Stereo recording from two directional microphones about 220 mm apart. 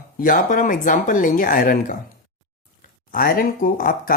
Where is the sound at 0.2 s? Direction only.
40° left (ahead or behind).